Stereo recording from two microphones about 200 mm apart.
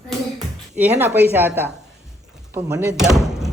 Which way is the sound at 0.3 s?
10° right (ahead or behind).